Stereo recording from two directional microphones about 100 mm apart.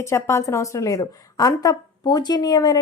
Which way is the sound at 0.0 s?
30° left (ahead or behind).